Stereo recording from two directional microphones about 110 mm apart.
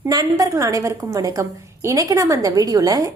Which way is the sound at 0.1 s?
35° right (ahead or behind).